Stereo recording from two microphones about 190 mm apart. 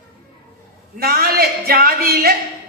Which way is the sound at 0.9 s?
55° right (ahead or behind).